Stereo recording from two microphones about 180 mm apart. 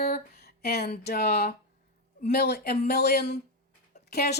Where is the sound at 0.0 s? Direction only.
60° left (ahead or behind).